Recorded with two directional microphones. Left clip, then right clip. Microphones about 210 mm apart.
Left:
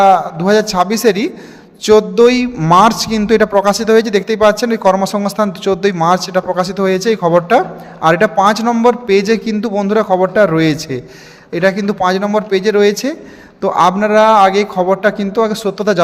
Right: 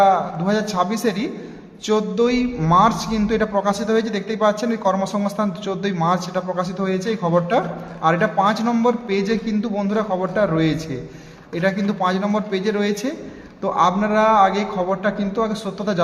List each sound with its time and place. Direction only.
0.0 s a man's voice: 45° left (ahead or behind)